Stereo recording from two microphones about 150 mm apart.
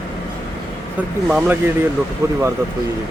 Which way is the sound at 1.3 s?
10° right (ahead or behind).